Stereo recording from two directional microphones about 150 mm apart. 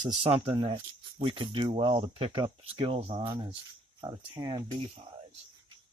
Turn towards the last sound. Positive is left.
turn(degrees=-30)  # may be behind; listen again after turning